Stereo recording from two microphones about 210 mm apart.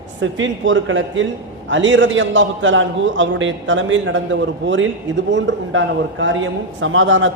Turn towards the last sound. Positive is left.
turn(degrees=-65)  # may be behind; listen again after turning